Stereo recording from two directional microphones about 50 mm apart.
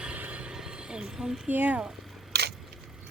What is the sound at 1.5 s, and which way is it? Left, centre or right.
Speech, right.